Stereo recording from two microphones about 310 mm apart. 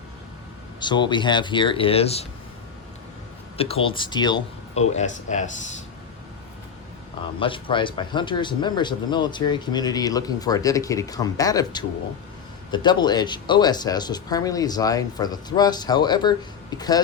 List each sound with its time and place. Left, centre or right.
0.8 s speech: centre
3.6 s speech: centre
7.3 s speech: centre